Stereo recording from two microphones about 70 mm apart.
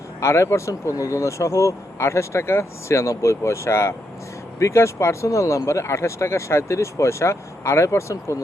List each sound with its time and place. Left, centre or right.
0.2 s speech: left